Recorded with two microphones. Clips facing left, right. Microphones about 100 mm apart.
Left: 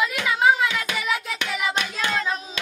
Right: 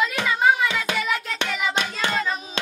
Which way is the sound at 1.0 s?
10° left (ahead or behind).